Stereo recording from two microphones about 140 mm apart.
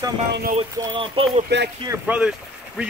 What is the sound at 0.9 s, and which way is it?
Speech, 40° right (ahead or behind).